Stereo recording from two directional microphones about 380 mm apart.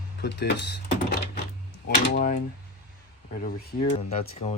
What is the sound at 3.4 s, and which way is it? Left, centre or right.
Speech, centre.